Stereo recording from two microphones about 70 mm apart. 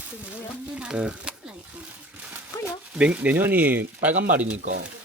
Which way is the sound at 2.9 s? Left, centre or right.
Centre.